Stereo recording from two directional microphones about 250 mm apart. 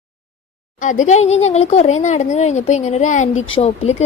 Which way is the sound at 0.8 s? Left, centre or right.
Left.